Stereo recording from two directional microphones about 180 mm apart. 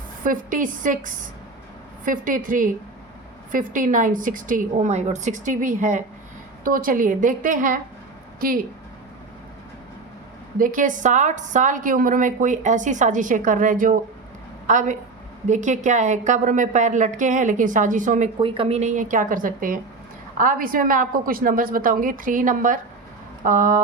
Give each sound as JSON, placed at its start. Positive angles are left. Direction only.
{"t": 0.3, "sound": "a woman's voice", "side_deg": -45}
{"t": 10.6, "sound": "a woman's voice", "side_deg": -50}
{"t": 18.3, "sound": "a woman's voice", "side_deg": -30}